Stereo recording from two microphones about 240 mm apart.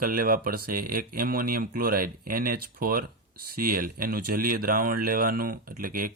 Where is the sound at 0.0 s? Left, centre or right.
Right.